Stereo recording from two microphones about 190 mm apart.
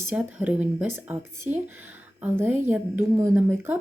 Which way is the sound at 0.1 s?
5° right (ahead or behind).